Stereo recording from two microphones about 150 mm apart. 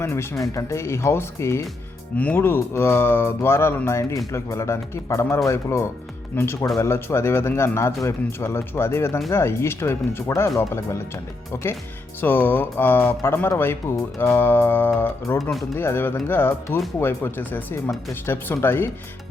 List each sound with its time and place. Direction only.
0.0 s speech: 20° left (ahead or behind)
15.4 s speech: centre (ahead or behind)
15.7 s speech: 15° left (ahead or behind)